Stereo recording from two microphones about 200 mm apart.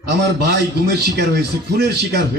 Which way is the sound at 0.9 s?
55° right (ahead or behind).